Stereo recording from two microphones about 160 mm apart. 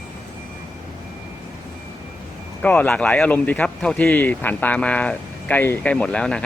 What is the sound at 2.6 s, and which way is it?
Speech, 10° left (ahead or behind).